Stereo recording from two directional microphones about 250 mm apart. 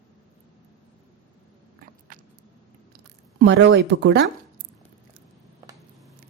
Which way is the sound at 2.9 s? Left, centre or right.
Right.